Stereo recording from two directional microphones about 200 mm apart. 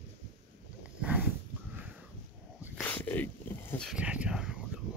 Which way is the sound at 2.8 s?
10° left (ahead or behind).